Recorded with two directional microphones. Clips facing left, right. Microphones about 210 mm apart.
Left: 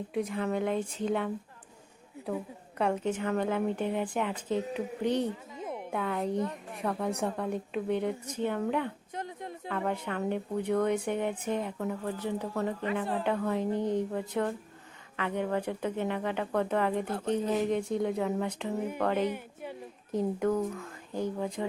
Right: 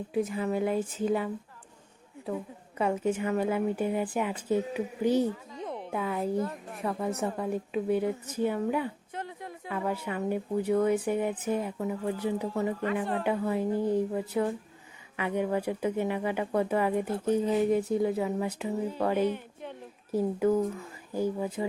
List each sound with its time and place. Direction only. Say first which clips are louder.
0.1 s a woman's voice: right 2 dB; 5° right (ahead or behind)
5.5 s music: right 1 dB; 10° left (ahead or behind)
5.9 s a woman's voice: right 1 dB; centre (ahead or behind)
9.1 s a sound: even; 20° left (ahead or behind)
9.6 s a woman's voice: right 1 dB; 5° right (ahead or behind)